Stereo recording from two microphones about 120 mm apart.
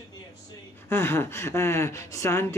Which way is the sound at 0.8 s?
20° left (ahead or behind).